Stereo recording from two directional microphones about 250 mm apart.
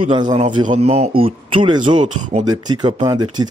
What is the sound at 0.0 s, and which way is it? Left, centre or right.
Speech, centre.